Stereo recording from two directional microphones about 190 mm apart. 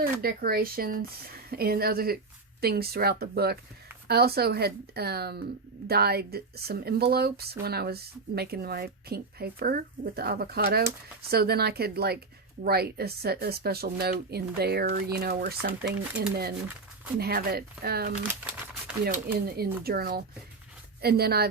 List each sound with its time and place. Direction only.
0.0 s speech: 50° right (ahead or behind)